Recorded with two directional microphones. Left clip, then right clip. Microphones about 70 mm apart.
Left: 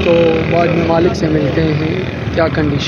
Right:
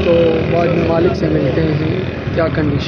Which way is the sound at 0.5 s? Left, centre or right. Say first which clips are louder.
Left 1 dB; centre.